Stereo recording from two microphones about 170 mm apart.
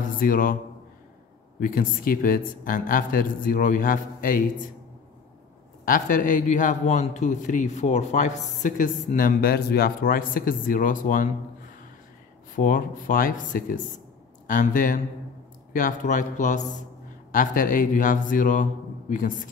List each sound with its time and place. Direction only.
0.2 s speech: 55° left (ahead or behind)
1.6 s speech: 55° left (ahead or behind)
5.9 s a man's voice: 50° left (ahead or behind)
12.5 s a man's voice: 50° left (ahead or behind)